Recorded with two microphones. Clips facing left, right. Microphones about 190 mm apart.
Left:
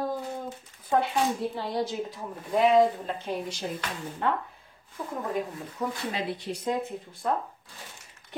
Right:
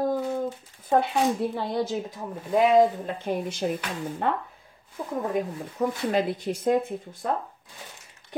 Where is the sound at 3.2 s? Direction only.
55° right (ahead or behind).